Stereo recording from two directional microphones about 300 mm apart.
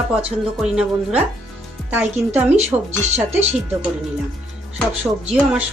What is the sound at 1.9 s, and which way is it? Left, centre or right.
Speech, centre.